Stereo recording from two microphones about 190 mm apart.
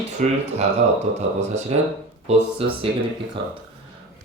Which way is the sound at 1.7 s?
40° right (ahead or behind).